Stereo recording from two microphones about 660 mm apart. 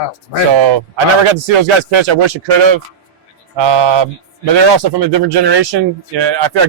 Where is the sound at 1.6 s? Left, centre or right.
Right.